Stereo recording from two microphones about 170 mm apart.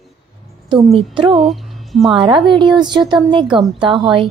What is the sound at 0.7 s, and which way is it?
Speech, 30° right (ahead or behind).